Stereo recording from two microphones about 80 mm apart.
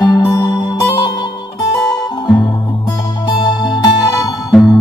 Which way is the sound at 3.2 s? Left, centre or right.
Left.